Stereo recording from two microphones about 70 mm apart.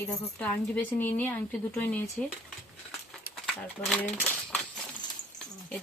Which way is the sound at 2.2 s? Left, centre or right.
Centre.